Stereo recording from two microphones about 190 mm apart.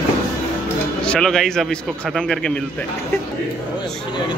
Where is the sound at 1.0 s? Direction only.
5° left (ahead or behind).